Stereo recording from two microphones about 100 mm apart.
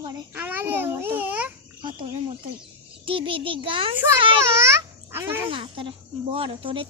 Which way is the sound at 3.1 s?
60° right (ahead or behind).